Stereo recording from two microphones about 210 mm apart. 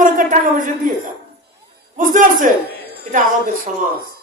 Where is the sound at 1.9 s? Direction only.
40° right (ahead or behind).